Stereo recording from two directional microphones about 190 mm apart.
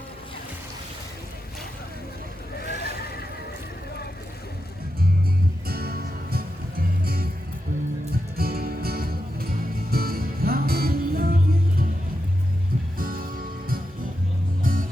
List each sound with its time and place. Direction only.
2.6 s neigh: 55° left (ahead or behind)
5.6 s music: 55° right (ahead or behind)
8.4 s music: 55° right (ahead or behind)
13.0 s music: 50° right (ahead or behind)